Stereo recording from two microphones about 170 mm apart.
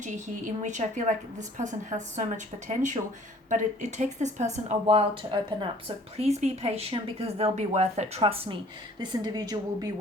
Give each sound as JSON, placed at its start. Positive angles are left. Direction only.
{"t": 0.0, "sound": "a woman's voice", "side_deg": -45}
{"t": 6.1, "sound": "a woman's voice", "side_deg": -40}